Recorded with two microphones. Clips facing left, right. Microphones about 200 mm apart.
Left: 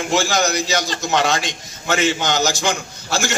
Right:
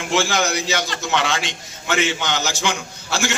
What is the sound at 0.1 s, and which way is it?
A man's voice, 40° left (ahead or behind).